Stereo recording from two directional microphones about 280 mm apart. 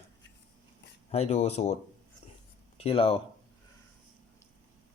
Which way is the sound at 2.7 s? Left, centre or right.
Centre.